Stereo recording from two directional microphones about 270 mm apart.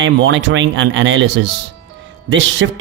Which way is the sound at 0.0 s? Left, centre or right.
Right.